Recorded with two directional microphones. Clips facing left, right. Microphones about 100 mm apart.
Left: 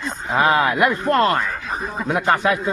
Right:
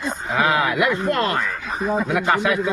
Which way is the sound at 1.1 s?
40° left (ahead or behind).